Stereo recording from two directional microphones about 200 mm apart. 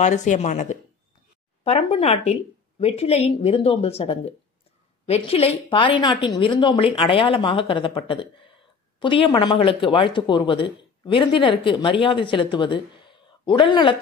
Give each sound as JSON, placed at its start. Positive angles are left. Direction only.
{"t": 0.0, "sound": "speech", "side_deg": 35}